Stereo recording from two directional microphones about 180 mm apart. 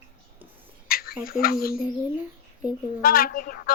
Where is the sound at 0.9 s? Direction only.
55° left (ahead or behind).